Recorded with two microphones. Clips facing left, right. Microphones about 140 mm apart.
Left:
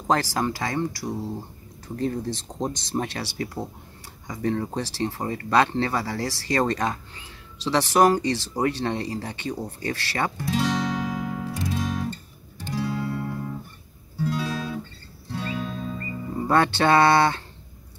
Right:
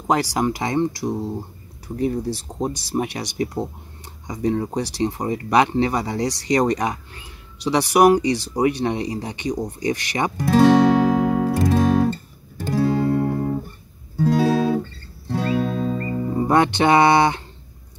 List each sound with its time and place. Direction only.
0.0 s speech: 15° right (ahead or behind)
2.0 s speech: 10° right (ahead or behind)
10.4 s music: 55° right (ahead or behind)
11.5 s music: 50° right (ahead or behind)
15.4 s music: 45° right (ahead or behind)
16.4 s speech: 15° right (ahead or behind)